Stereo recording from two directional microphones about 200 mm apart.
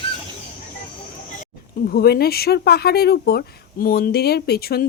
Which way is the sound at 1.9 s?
50° left (ahead or behind).